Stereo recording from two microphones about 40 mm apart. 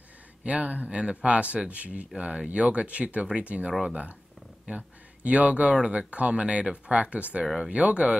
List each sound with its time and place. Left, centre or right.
0.4 s speech: right
0.8 s speech: right
4.7 s speech: right